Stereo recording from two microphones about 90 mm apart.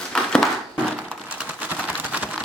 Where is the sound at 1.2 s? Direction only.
10° right (ahead or behind).